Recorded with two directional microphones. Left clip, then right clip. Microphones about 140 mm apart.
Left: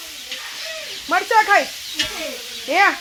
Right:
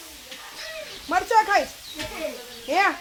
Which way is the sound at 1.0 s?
50° left (ahead or behind).